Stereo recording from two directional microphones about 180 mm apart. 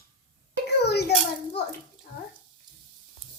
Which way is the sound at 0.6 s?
65° left (ahead or behind).